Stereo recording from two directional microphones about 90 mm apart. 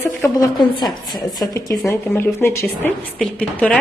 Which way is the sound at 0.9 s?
Centre (ahead or behind).